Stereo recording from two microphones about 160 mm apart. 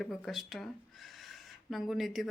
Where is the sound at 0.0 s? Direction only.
Centre (ahead or behind).